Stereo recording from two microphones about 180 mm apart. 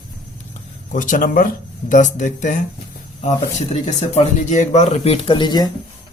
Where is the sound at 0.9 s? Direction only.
45° left (ahead or behind); by 5.7 s 25° left (ahead or behind).